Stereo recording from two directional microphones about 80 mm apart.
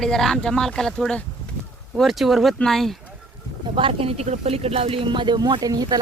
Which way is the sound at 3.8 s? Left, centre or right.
Right.